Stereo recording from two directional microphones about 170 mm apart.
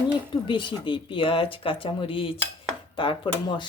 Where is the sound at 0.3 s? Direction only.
30° left (ahead or behind).